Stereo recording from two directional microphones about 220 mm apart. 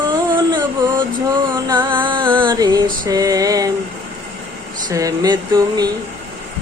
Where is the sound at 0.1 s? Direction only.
20° right (ahead or behind).